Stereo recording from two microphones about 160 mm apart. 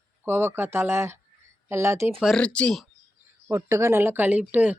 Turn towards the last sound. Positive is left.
turn(degrees=-10)  # may be behind; listen again after turning